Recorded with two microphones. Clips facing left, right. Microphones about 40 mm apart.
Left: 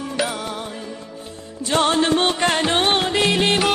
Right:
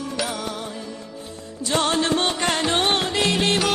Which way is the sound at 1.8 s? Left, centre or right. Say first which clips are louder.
Left 4 dB; left.